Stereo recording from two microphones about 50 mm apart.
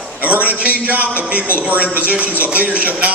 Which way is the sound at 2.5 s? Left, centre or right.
Right.